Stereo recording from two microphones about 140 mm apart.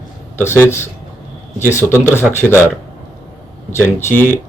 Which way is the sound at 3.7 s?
15° left (ahead or behind).